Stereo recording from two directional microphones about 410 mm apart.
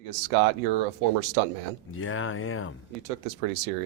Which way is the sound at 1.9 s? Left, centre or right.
Left.